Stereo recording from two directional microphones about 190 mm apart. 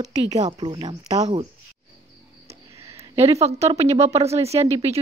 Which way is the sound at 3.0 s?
35° right (ahead or behind).